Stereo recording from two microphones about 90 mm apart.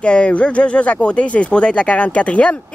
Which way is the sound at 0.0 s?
10° left (ahead or behind).